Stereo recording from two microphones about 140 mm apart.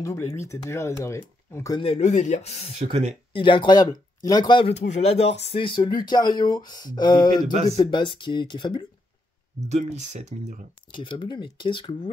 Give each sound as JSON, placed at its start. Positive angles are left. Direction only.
{"t": 0.0, "sound": "speech", "side_deg": 20}
{"t": 1.8, "sound": "speech", "side_deg": 50}
{"t": 2.8, "sound": "speech", "side_deg": -50}
{"t": 3.3, "sound": "speech", "side_deg": 35}
{"t": 4.7, "sound": "speech", "side_deg": 55}
{"t": 9.7, "sound": "speech", "side_deg": -55}
{"t": 11.0, "sound": "speech", "side_deg": 35}